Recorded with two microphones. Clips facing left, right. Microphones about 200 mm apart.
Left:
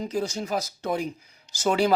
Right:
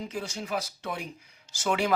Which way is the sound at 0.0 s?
40° left (ahead or behind).